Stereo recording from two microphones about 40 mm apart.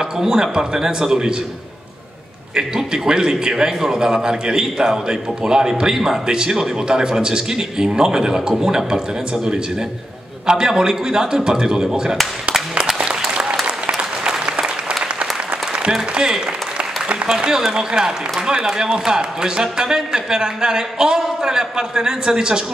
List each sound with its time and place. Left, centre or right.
0.2 s a man's voice: centre
2.5 s a man's voice: centre
10.4 s a man's voice: centre
13.3 s applause: right
17.4 s a man's voice: centre